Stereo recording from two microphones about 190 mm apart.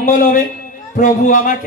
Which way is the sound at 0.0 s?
45° left (ahead or behind).